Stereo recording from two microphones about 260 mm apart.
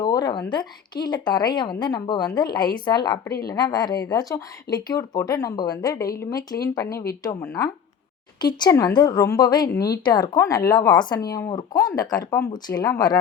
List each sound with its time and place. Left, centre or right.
0.0 s a woman's voice: centre